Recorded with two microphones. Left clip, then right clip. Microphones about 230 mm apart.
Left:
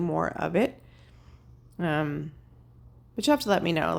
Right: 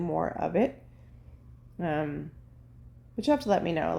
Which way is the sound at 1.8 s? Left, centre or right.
Left.